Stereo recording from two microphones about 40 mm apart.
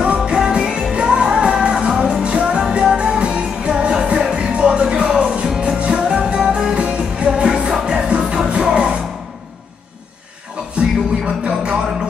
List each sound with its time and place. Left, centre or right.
0.0 s music: right
10.8 s music: right